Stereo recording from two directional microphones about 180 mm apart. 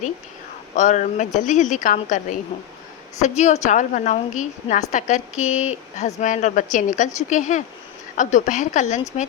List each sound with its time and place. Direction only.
0.8 s a woman's voice: 40° left (ahead or behind)